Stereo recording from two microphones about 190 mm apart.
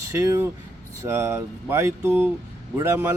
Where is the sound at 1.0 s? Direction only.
15° right (ahead or behind).